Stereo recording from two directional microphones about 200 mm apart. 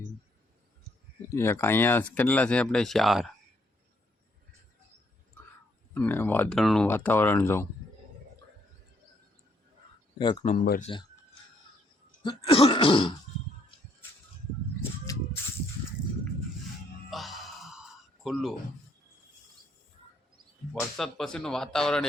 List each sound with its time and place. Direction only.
1.3 s speech: 10° left (ahead or behind)
5.9 s speech: 10° left (ahead or behind)
10.4 s speech: 40° left (ahead or behind)
12.2 s throat clearing: 25° left (ahead or behind)
17.1 s a sound: centre (ahead or behind)
20.7 s speech: centre (ahead or behind)